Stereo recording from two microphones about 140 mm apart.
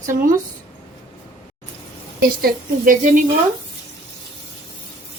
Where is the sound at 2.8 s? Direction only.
70° right (ahead or behind).